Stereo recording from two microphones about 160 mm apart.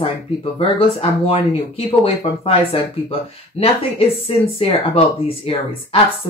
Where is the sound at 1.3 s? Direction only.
35° left (ahead or behind).